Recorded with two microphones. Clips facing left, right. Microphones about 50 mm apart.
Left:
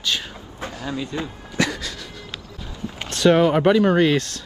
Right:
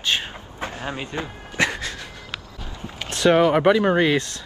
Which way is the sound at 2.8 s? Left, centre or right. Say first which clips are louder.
Left 2 dB; right.